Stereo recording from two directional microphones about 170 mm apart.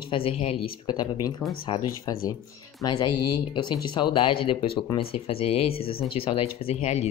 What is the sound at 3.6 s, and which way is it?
Speech, 30° left (ahead or behind).